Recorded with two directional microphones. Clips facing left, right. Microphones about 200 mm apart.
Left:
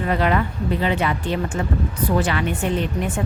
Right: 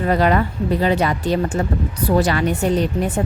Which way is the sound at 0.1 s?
40° right (ahead or behind).